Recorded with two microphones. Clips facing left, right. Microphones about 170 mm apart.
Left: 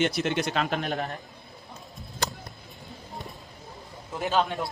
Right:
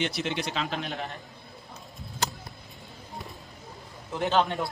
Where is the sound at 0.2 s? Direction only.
50° left (ahead or behind).